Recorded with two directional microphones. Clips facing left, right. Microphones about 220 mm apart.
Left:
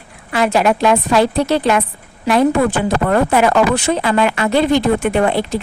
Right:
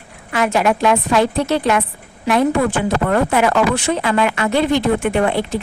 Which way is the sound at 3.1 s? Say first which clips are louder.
Left 3 dB; 35° left (ahead or behind).